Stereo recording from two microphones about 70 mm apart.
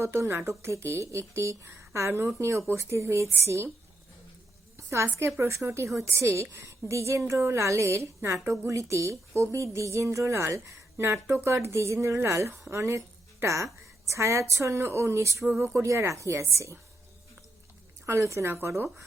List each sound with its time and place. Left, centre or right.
0.0 s a woman's voice: right
5.1 s a woman's voice: right
18.0 s a woman's voice: right